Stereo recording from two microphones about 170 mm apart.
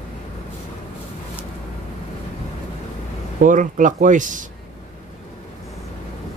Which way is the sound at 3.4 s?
50° right (ahead or behind).